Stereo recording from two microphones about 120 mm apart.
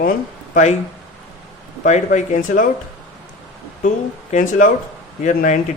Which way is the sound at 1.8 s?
90° left.